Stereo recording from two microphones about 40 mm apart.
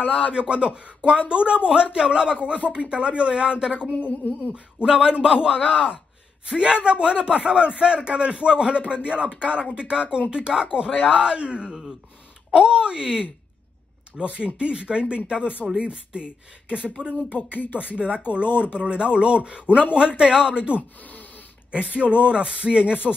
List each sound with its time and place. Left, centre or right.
0.0 s speech: left
0.3 s a man's voice: right
4.0 s a sound: left
4.7 s a man's voice: right
5.7 s speech: left
6.4 s a man's voice: centre
17.5 s speech: left
17.9 s a man's voice: right